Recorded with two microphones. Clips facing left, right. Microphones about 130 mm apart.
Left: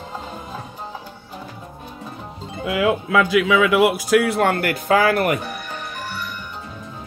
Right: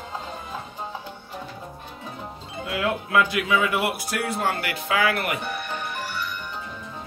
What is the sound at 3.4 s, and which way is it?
Speech, 90° left.